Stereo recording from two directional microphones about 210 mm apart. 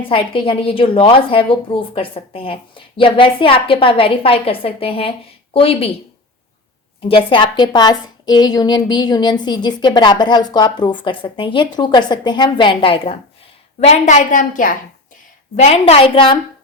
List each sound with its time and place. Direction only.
0.1 s a woman's voice: 25° left (ahead or behind)
7.0 s a woman's voice: 25° left (ahead or behind)